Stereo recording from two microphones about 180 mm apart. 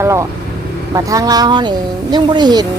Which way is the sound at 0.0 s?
15° right (ahead or behind).